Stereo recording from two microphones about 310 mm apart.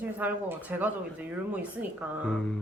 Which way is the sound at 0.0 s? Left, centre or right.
Centre.